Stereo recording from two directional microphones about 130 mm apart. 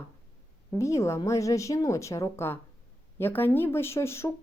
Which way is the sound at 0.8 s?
20° left (ahead or behind).